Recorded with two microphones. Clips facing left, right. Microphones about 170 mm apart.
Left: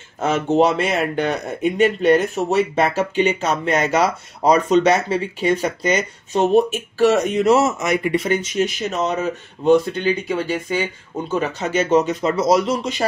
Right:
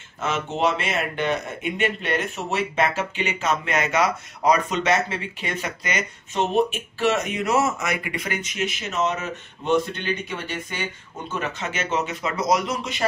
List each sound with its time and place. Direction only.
0.2 s speech: 40° left (ahead or behind)
7.4 s speech: 25° left (ahead or behind)